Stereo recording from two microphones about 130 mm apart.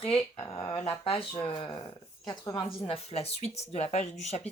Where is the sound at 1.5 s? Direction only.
35° left (ahead or behind).